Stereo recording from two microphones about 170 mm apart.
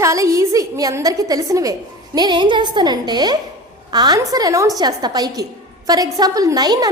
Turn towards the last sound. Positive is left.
turn(degrees=-25)  # may be behind; listen again after turning